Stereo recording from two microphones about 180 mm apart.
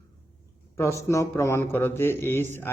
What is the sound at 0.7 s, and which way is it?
A man's voice, 15° left (ahead or behind).